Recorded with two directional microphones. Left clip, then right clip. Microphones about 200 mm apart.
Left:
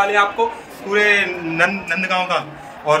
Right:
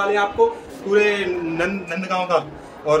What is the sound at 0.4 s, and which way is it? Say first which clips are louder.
Speech: right 2 dB; 5° right (ahead or behind).